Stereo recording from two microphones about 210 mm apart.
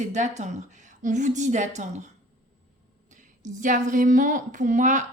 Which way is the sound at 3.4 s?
35° right (ahead or behind).